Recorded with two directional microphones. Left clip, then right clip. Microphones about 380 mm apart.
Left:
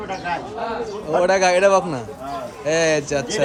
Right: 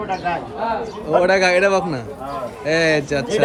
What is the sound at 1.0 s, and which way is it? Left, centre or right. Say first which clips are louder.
A man's voice: right 2 dB; centre.